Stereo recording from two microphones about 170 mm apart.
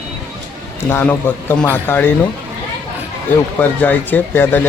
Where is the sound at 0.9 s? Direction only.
15° left (ahead or behind).